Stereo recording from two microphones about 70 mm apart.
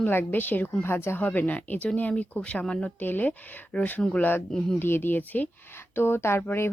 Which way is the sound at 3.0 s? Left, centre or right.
Left.